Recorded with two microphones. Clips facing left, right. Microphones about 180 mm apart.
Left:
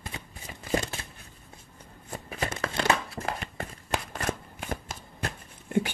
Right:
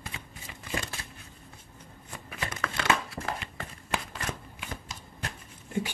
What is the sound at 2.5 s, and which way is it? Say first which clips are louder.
Crumpling: left 2 dB; 30° left (ahead or behind).